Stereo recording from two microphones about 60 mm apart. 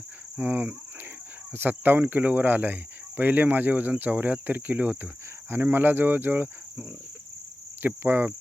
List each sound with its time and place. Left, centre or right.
0.3 s speech: right
7.8 s speech: right